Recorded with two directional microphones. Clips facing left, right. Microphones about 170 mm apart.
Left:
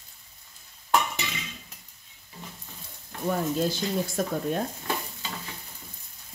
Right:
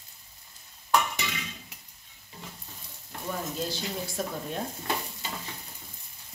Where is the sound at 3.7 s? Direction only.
50° left (ahead or behind).